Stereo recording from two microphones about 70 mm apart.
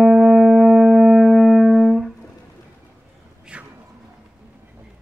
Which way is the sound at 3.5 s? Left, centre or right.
Centre.